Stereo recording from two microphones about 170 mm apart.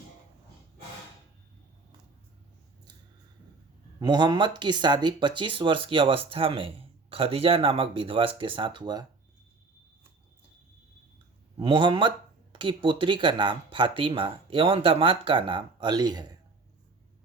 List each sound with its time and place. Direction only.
4.0 s speech: 25° right (ahead or behind)
11.6 s speech: 30° right (ahead or behind)